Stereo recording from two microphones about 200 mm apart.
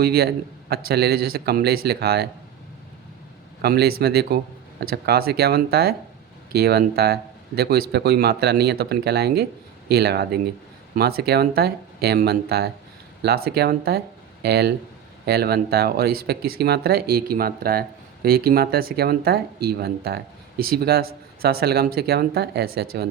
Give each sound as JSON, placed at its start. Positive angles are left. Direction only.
{"t": 0.0, "sound": "speech", "side_deg": -50}
{"t": 3.6, "sound": "speech", "side_deg": -50}